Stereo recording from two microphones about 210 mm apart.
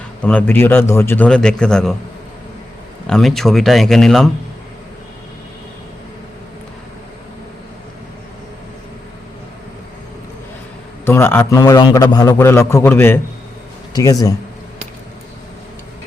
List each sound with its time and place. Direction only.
0.2 s a man's voice: 5° left (ahead or behind)
3.1 s a man's voice: centre (ahead or behind)
11.0 s a man's voice: 10° left (ahead or behind)